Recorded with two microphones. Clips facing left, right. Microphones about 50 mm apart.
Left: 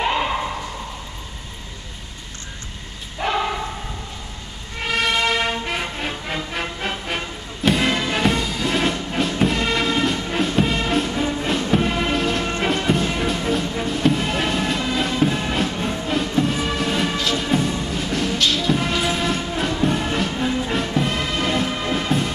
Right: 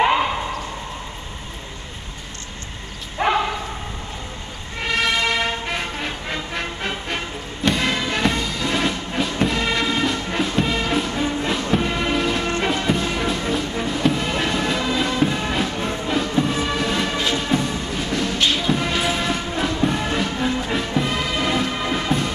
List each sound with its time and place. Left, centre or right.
3.2 s bow-wow: right
4.8 s music: centre
18.4 s music: centre
18.7 s music: centre